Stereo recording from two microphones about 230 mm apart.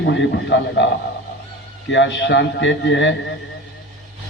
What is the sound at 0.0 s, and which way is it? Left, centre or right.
Speech, left.